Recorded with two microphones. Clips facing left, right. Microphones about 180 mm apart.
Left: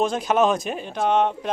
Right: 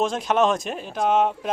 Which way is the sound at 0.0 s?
Centre (ahead or behind).